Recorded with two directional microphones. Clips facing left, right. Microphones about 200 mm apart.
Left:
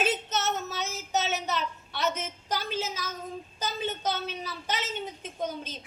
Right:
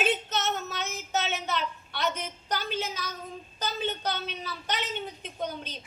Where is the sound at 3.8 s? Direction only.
5° left (ahead or behind).